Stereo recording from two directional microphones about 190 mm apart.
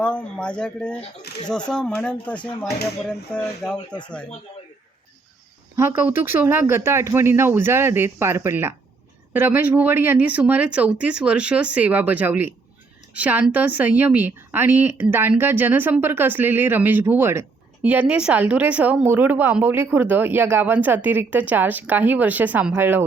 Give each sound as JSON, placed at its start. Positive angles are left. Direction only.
{"t": 0.0, "sound": "speech", "side_deg": 5}
{"t": 3.8, "sound": "speech", "side_deg": 25}
{"t": 5.7, "sound": "speech", "side_deg": -15}